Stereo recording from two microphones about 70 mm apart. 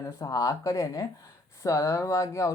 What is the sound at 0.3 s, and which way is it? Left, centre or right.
Speech, left.